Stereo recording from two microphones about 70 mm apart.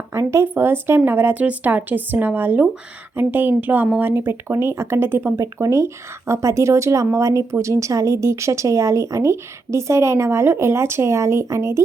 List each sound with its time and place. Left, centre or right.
0.1 s a woman's voice: right